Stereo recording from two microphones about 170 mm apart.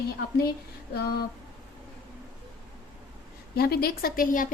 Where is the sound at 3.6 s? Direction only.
65° left (ahead or behind).